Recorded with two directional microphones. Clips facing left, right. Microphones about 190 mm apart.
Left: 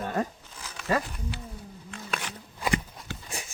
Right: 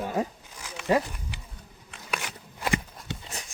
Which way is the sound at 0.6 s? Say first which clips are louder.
Right 3 dB; 15° right (ahead or behind).